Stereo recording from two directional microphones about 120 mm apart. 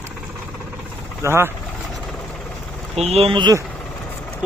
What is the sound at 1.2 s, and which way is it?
Speech, 20° right (ahead or behind).